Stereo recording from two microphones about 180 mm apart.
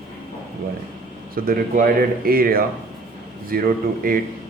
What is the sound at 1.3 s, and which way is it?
Speech, 55° right (ahead or behind).